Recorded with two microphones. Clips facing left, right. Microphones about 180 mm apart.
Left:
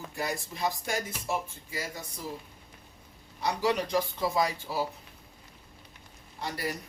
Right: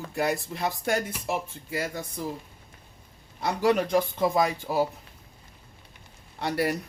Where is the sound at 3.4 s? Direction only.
55° right (ahead or behind).